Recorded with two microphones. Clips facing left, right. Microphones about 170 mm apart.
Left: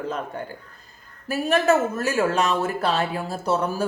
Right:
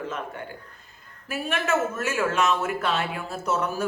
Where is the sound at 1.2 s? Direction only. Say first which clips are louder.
Left 8 dB; 40° left (ahead or behind).